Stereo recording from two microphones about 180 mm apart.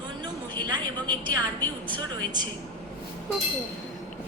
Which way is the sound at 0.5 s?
25° right (ahead or behind).